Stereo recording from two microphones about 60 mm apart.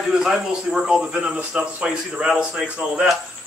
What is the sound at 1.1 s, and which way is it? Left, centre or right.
Speech, centre.